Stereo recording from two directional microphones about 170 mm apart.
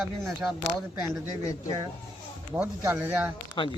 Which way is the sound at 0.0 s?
Centre (ahead or behind).